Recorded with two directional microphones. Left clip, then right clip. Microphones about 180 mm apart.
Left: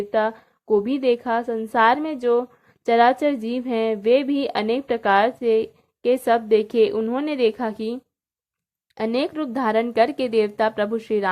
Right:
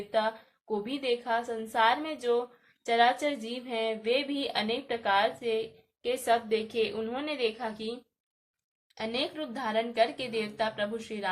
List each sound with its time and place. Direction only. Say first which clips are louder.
0.1 s speech: left 5 dB; 45° left (ahead or behind)
9.0 s speech: left 9 dB; 50° left (ahead or behind)